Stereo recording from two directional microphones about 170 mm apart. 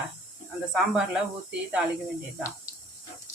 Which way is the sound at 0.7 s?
5° right (ahead or behind).